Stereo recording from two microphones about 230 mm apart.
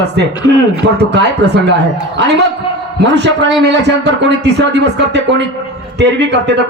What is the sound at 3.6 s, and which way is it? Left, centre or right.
A man's voice, right.